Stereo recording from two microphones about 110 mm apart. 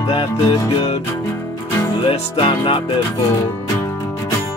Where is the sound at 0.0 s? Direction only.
55° left (ahead or behind).